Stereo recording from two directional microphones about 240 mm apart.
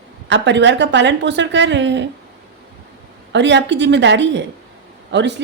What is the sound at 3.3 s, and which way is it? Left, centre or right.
A woman's voice, right.